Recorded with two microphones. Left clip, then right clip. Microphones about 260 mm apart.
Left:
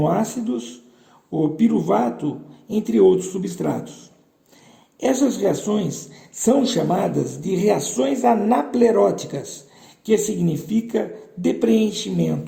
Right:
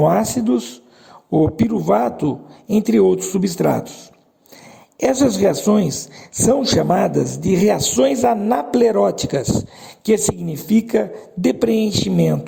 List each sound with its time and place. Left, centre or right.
0.0 s a man's voice: right
4.9 s a man's voice: right